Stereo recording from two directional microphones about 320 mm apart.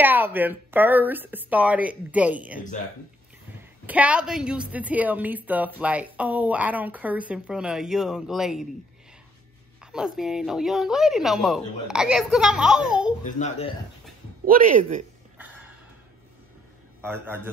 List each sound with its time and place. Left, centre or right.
0.0 s a woman's voice: centre
3.8 s a woman's voice: centre
9.9 s a woman's voice: centre
13.4 s speech: centre
14.4 s speech: right
17.0 s a man's voice: centre